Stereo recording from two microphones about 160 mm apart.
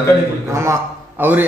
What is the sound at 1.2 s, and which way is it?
Speech, 10° right (ahead or behind).